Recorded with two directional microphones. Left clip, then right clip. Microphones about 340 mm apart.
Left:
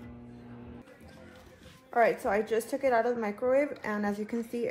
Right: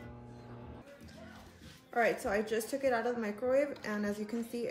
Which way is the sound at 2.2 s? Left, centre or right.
Centre.